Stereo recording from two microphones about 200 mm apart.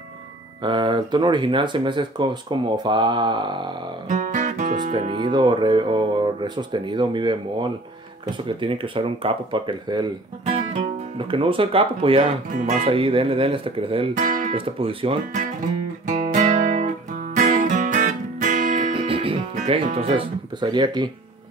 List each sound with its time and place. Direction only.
0.6 s music: 25° right (ahead or behind)
4.1 s music: 35° right (ahead or behind)
10.4 s speech: 35° right (ahead or behind)
12.4 s music: 40° right (ahead or behind)
14.1 s speech: 40° right (ahead or behind)
14.5 s music: 25° right (ahead or behind)
16.1 s guitar: 40° right (ahead or behind)
18.9 s music: 25° right (ahead or behind)
19.5 s speech: 35° right (ahead or behind)
20.6 s music: 20° right (ahead or behind)